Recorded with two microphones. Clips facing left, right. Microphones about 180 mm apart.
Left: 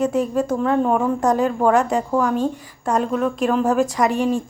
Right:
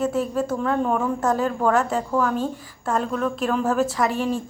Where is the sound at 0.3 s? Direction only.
10° left (ahead or behind).